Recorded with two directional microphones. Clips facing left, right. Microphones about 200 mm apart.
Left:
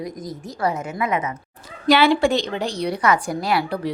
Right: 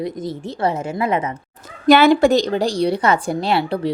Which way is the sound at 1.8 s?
45° right (ahead or behind).